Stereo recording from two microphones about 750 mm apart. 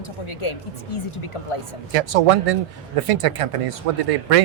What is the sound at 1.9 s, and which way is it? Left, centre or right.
Speech, right.